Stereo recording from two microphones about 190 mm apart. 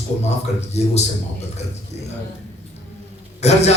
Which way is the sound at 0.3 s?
35° left (ahead or behind).